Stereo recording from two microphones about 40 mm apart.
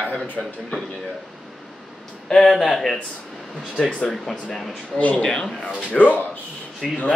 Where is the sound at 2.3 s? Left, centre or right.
Centre.